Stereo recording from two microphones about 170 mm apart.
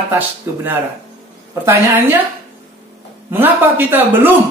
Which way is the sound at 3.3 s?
10° right (ahead or behind).